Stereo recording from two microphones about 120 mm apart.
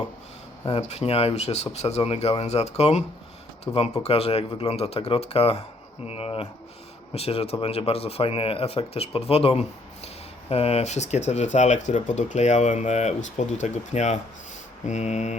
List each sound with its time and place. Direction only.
0.7 s speech: 65° left (ahead or behind)